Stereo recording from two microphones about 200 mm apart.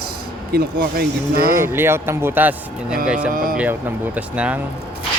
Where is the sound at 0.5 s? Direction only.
50° right (ahead or behind).